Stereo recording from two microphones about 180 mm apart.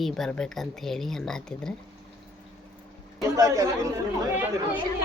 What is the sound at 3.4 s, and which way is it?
Speech, 15° right (ahead or behind).